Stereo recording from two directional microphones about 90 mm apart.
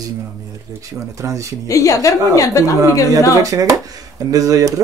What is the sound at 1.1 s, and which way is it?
Speech, 35° right (ahead or behind).